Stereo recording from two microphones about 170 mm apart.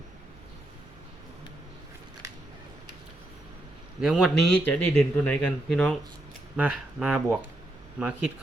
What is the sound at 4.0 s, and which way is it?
A man's voice, 5° right (ahead or behind).